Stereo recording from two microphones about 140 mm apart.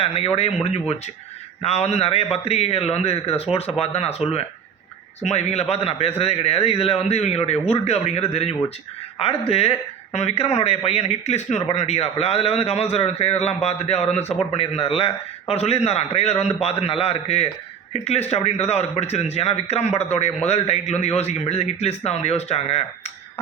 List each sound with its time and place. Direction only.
0.0 s speech: 45° left (ahead or behind)